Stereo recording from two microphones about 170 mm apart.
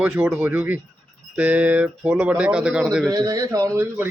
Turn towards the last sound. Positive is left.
turn(degrees=-15)  # may be behind; listen again after turning